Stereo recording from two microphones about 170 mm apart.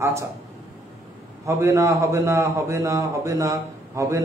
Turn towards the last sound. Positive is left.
turn(degrees=-20)  # may be behind; listen again after turning